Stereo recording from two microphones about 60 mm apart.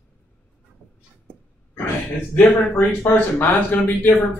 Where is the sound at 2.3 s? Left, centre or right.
Left.